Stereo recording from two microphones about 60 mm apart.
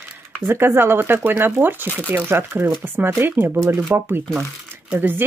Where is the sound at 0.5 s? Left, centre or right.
Right.